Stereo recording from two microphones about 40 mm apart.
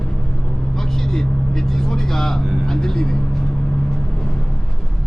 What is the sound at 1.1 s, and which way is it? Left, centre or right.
Vehicle, centre.